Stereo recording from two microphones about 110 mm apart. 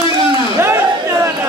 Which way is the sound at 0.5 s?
25° right (ahead or behind).